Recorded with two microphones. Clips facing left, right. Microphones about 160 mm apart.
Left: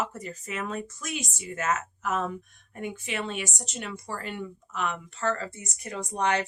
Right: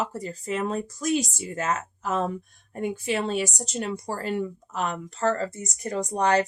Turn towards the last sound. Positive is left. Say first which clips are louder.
# right 5 dB
turn(degrees=-35)  # may be behind; listen again after turning